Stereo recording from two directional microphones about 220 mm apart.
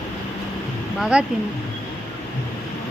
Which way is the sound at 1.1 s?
5° right (ahead or behind).